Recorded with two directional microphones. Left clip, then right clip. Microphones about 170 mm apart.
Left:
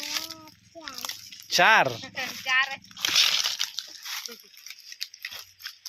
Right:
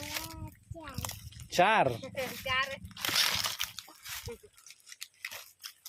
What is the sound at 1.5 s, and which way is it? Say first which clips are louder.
Speech: left 6 dB; 5° right (ahead or behind).